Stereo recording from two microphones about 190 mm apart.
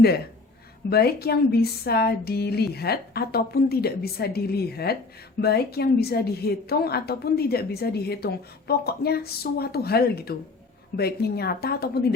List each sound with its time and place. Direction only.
0.9 s a woman's voice: 55° left (ahead or behind)